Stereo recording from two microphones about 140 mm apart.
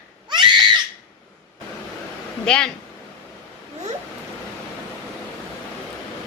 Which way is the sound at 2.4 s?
5° left (ahead or behind).